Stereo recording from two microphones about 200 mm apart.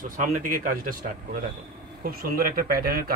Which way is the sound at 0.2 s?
40° right (ahead or behind).